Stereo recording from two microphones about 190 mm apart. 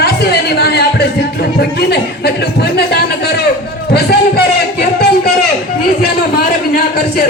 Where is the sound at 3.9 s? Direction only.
55° left (ahead or behind).